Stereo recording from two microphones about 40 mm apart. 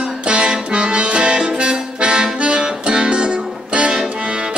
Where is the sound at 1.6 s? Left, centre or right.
Right.